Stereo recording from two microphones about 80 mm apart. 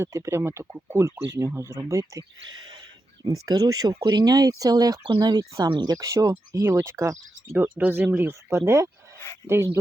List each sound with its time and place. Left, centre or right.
0.0 s speech: right
3.2 s speech: right
6.5 s speech: right
7.5 s speech: right
8.4 s speech: right